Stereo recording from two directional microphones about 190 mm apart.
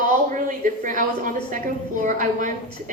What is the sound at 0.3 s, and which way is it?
A woman's voice, 45° right (ahead or behind).